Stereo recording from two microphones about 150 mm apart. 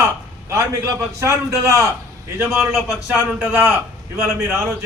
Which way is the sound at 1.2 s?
20° right (ahead or behind).